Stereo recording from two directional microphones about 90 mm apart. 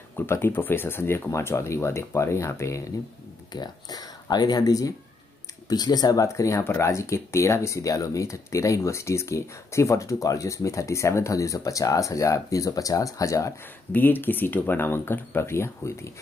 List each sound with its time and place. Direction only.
0.3 s speech: 25° left (ahead or behind)
3.5 s speech: 45° left (ahead or behind)
13.9 s speech: 20° left (ahead or behind)